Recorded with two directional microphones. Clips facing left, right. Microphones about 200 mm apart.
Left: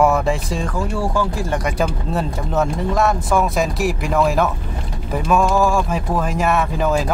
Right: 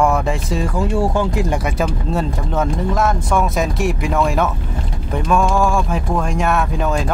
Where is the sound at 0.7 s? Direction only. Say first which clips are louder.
Right 3 dB; 20° right (ahead or behind).